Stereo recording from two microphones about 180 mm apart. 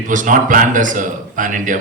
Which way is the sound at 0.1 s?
45° right (ahead or behind).